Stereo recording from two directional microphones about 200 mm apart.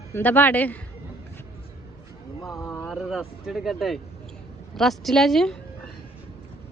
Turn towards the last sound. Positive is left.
turn(degrees=0)  # may be behind; listen again after turning